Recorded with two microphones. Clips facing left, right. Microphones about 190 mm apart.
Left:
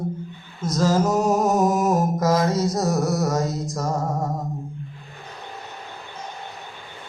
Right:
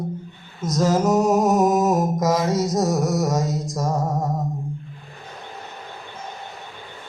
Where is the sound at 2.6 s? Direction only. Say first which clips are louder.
Right 1 dB; 20° right (ahead or behind).